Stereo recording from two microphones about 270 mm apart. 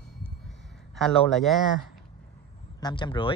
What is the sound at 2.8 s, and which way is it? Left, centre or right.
Speech, centre.